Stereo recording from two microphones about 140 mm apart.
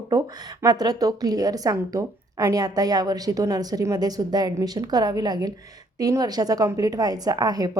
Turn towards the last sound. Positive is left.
turn(degrees=-25)  # may be behind; listen again after turning